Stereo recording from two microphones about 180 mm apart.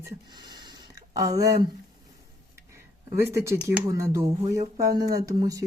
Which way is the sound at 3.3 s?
15° right (ahead or behind).